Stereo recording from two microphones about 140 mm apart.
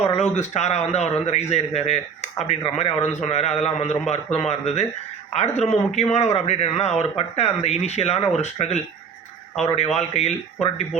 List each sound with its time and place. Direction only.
0.0 s a man's voice: 50° left (ahead or behind)